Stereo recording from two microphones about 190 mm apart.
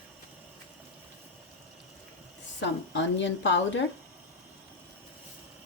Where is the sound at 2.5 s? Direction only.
75° left (ahead or behind).